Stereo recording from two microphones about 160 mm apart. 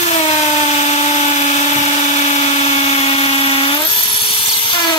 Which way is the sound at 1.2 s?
45° left (ahead or behind).